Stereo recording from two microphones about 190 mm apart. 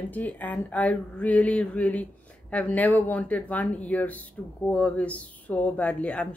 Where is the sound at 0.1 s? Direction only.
10° left (ahead or behind).